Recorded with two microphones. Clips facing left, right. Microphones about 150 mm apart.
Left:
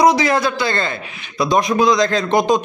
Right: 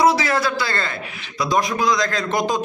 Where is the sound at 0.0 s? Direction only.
20° left (ahead or behind).